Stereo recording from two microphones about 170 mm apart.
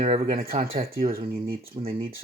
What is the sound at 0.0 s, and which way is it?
Speech, 35° right (ahead or behind).